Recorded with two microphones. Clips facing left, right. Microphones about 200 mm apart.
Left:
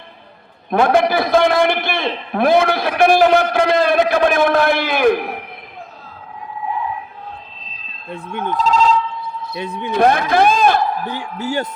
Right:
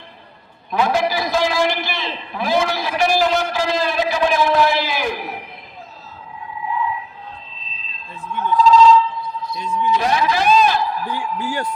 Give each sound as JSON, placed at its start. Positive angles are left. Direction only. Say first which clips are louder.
{"t": 0.7, "sound": "a man's voice", "louder": "left 5 dB", "side_deg": 55}
{"t": 8.1, "sound": "a man's voice", "louder": "even", "side_deg": 60}
{"t": 8.6, "sound": "telephone bell ringing", "louder": "right 4 dB", "side_deg": 60}
{"t": 11.0, "sound": "speech", "louder": "even", "side_deg": 25}